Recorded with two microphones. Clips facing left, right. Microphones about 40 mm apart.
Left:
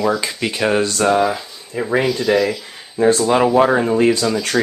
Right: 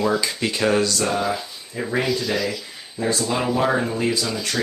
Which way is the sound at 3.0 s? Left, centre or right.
Left.